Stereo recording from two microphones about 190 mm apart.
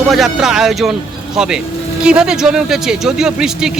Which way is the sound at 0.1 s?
Centre (ahead or behind).